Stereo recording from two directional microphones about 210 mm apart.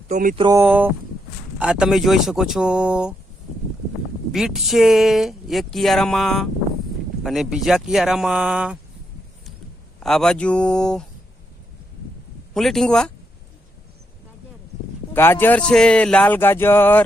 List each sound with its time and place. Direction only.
0.1 s speech: 40° right (ahead or behind)
0.3 s speech: 15° right (ahead or behind)
4.3 s speech: centre (ahead or behind)
10.0 s speech: 5° left (ahead or behind)
12.5 s speech: centre (ahead or behind)
15.1 s speech: 10° left (ahead or behind)